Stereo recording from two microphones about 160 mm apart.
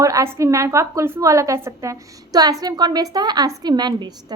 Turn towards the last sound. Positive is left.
turn(degrees=-25)  # may be behind; listen again after turning